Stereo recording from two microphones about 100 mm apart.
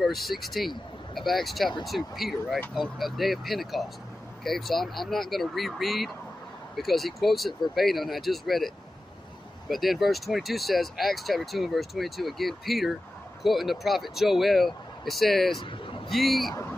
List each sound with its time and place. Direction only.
0.0 s speech: centre (ahead or behind)
15.6 s a sound: 55° left (ahead or behind)
16.1 s speech: centre (ahead or behind)